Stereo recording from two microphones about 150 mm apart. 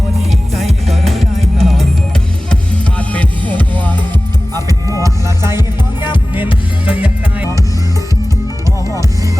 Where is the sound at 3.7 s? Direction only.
30° right (ahead or behind); by 7.5 s 10° right (ahead or behind).